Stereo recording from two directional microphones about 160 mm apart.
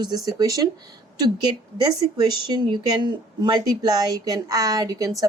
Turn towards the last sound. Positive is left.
turn(degrees=-20)  # may be behind; listen again after turning